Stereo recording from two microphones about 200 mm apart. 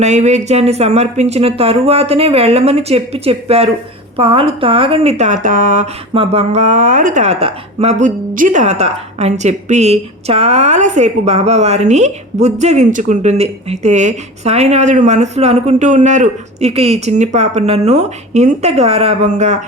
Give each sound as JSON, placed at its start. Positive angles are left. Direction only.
{"t": 0.0, "sound": "speech", "side_deg": -35}